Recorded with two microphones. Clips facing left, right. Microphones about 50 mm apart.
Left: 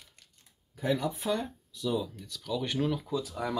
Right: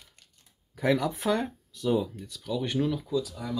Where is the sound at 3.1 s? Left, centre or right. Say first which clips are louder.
Right 4 dB; left.